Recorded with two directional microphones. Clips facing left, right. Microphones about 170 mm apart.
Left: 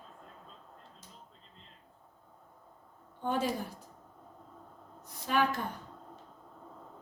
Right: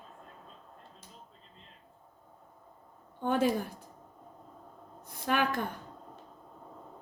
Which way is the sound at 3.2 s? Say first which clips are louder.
Right 4 dB; 55° right (ahead or behind).